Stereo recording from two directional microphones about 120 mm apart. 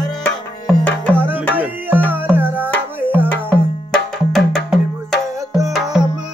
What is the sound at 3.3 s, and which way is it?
Music, 15° left (ahead or behind).